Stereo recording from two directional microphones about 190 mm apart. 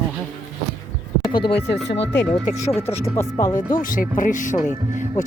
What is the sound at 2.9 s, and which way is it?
Speech, 35° left (ahead or behind).